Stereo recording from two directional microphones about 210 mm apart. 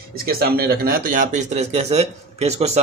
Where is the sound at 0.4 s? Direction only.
45° right (ahead or behind).